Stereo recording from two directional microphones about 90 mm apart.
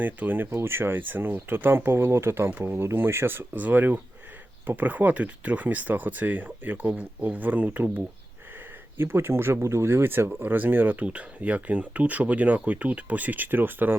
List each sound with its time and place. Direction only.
0.0 s speech: 20° right (ahead or behind)